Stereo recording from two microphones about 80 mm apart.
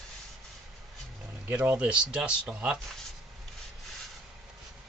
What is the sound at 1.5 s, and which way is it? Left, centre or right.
Speech, right.